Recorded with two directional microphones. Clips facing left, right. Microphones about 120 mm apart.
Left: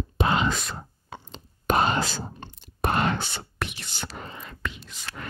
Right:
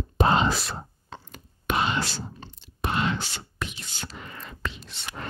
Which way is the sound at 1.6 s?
45° left (ahead or behind).